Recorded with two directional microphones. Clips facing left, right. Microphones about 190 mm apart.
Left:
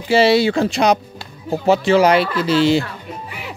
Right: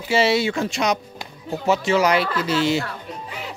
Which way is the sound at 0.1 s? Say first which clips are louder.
Left 6 dB; 35° left (ahead or behind).